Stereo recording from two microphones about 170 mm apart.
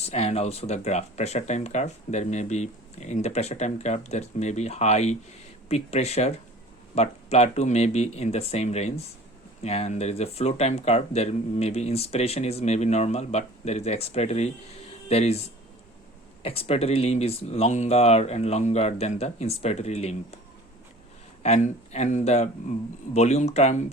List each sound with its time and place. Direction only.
0.0 s speech: 40° left (ahead or behind)
21.4 s speech: 40° left (ahead or behind)